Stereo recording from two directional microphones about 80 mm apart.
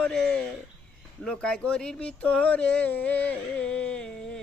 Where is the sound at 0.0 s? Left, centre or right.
Centre.